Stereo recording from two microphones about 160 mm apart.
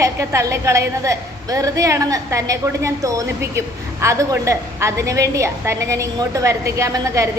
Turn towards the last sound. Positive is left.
turn(degrees=-20)  # may be behind; listen again after turning